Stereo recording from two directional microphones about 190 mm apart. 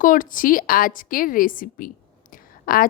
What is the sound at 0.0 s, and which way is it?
A woman's voice, 45° left (ahead or behind).